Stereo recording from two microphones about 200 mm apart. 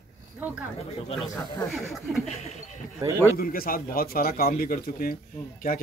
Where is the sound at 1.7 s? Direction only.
Centre (ahead or behind).